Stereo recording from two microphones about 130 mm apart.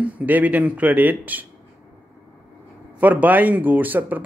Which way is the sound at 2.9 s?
10° right (ahead or behind).